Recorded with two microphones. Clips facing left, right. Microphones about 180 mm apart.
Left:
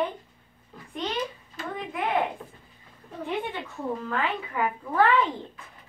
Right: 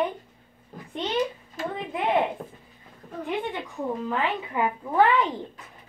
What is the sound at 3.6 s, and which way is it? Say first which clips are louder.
A woman's voice: right 2 dB; 15° right (ahead or behind).